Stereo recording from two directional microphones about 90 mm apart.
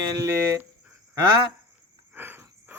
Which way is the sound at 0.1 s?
40° right (ahead or behind).